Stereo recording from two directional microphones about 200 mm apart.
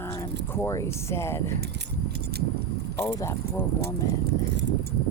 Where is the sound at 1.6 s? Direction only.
55° right (ahead or behind).